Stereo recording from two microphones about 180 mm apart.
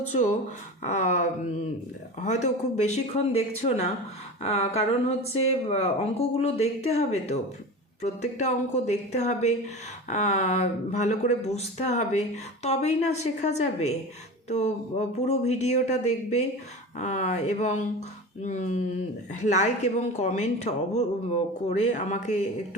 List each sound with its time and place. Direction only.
0.8 s speech: 40° left (ahead or behind)